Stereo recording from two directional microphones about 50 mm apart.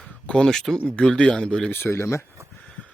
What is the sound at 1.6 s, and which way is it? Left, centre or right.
Speech, left.